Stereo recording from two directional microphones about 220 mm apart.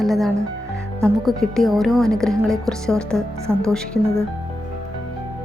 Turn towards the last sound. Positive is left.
turn(degrees=5)  # may be behind; listen again after turning